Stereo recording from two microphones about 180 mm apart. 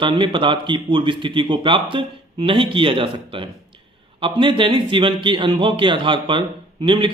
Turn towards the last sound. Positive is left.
turn(degrees=-25)  # may be behind; listen again after turning